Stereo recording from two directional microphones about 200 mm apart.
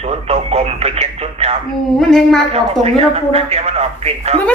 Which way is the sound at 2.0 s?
Centre (ahead or behind).